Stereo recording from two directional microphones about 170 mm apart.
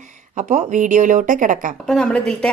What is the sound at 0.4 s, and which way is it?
Speech, 45° right (ahead or behind).